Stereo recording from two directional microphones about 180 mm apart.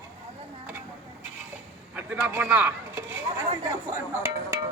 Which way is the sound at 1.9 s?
10° right (ahead or behind).